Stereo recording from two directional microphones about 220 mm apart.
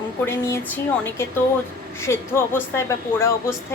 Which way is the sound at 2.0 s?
10° left (ahead or behind).